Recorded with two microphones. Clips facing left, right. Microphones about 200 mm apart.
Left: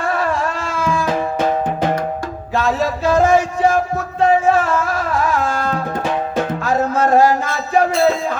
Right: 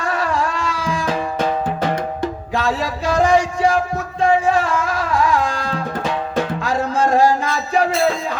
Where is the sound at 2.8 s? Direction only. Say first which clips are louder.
Left 5 dB; 50° left (ahead or behind).